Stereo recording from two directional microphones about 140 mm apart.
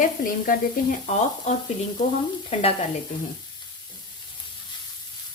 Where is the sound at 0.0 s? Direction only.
70° left (ahead or behind).